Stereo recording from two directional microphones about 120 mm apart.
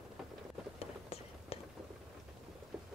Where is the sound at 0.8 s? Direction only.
55° left (ahead or behind).